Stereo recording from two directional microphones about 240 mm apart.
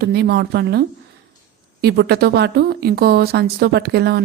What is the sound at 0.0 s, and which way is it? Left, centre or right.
A woman's voice, right.